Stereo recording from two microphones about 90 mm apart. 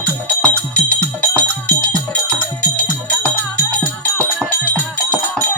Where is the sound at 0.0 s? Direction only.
15° left (ahead or behind).